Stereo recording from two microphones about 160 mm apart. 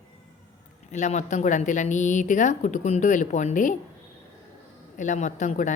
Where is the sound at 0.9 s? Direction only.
45° left (ahead or behind).